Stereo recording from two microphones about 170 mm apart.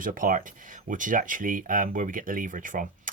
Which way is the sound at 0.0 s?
55° right (ahead or behind).